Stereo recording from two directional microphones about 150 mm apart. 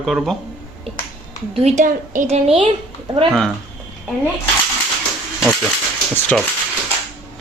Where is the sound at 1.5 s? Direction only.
45° right (ahead or behind).